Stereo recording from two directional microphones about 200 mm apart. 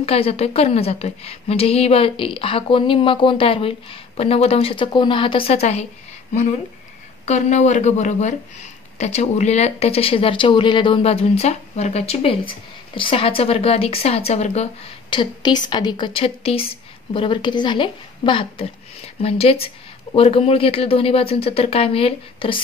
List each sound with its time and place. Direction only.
0.0 s speech: 30° left (ahead or behind)
7.2 s speech: 35° left (ahead or behind)